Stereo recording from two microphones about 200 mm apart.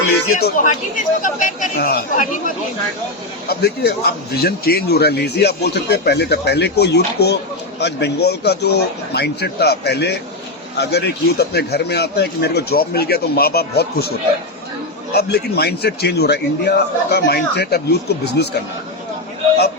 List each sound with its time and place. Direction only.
0.4 s speech: 40° left (ahead or behind)
3.5 s a man's voice: 55° left (ahead or behind)
15.1 s speech: 55° left (ahead or behind)